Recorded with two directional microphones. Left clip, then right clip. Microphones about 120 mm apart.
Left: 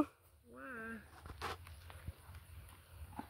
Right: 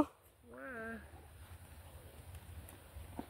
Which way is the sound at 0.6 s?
15° left (ahead or behind).